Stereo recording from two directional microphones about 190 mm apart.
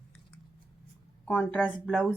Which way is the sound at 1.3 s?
10° left (ahead or behind).